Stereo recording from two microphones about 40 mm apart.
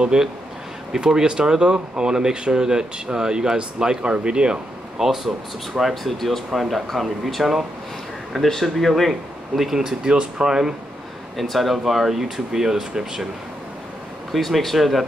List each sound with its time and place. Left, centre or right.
0.1 s speech: centre
4.9 s speech: centre
9.6 s speech: centre
11.3 s speech: centre
14.3 s speech: centre